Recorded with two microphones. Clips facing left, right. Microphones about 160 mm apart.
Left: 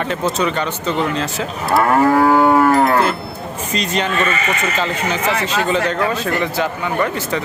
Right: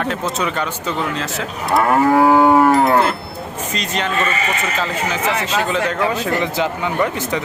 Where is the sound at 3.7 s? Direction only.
Centre (ahead or behind).